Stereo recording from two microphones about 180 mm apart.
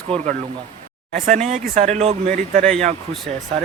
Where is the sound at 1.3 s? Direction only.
40° right (ahead or behind).